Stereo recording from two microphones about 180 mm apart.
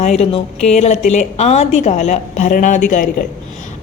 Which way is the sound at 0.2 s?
35° left (ahead or behind).